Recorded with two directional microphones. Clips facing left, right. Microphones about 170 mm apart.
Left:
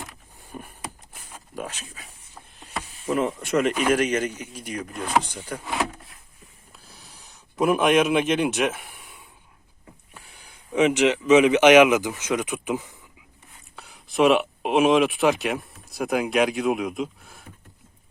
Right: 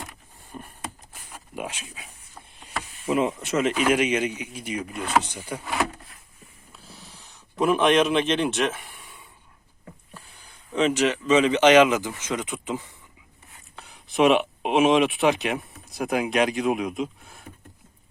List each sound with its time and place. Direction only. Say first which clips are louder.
0.5 s a sound: left 1 dB; 5° left (ahead or behind)
1.1 s a sound: even; 10° right (ahead or behind)
3.1 s speech: even; 5° right (ahead or behind)
5.0 s speech: even; 10° left (ahead or behind)
5.3 s speech: even; 10° right (ahead or behind)
7.6 s speech: even; 5° left (ahead or behind)
13.7 s speech: even; centre (ahead or behind)